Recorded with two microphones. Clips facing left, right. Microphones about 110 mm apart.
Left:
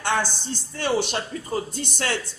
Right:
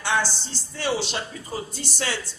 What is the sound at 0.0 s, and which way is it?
A man's voice, 50° left (ahead or behind).